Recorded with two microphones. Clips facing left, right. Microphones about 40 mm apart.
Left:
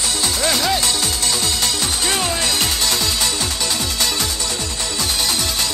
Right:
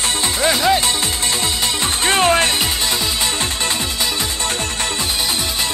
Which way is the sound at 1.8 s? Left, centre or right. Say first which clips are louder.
Right 4 dB; right.